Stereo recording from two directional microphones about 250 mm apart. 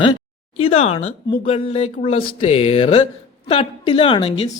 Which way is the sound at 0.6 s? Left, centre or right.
Left.